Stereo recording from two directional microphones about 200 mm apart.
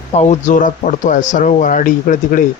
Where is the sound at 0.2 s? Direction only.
35° left (ahead or behind).